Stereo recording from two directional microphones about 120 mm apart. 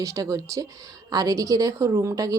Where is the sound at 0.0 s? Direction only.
30° right (ahead or behind).